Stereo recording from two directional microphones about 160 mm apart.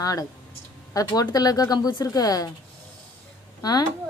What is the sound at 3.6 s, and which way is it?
Speech, 25° left (ahead or behind).